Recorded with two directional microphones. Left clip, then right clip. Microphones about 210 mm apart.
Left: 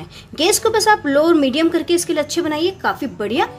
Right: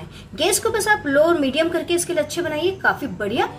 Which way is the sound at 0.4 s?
40° left (ahead or behind).